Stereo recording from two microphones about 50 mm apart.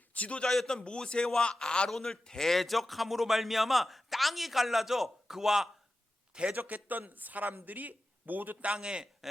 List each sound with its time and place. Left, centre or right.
0.1 s a man's voice: left
0.4 s a man's voice: centre
6.3 s a man's voice: right
6.6 s speech: right
8.6 s a man's voice: centre